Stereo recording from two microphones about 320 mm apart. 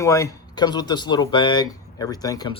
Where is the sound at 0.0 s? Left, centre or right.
Centre.